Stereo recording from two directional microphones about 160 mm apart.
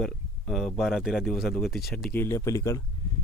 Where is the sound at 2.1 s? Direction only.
15° left (ahead or behind).